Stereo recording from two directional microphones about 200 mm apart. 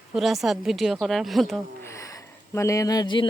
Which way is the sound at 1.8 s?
15° left (ahead or behind).